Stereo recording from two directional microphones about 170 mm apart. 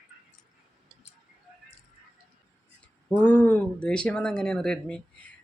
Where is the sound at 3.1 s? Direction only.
10° left (ahead or behind).